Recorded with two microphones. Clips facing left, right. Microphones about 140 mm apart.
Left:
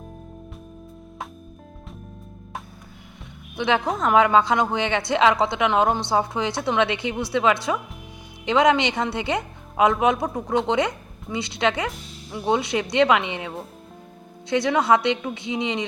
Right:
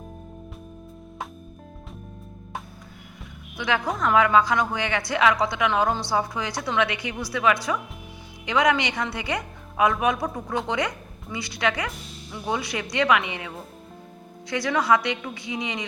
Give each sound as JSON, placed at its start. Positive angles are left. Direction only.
{"t": 3.9, "sound": "a woman's voice", "side_deg": 25}
{"t": 14.5, "sound": "a woman's voice", "side_deg": 25}